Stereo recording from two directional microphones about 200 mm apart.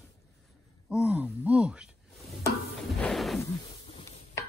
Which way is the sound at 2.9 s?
Centre (ahead or behind).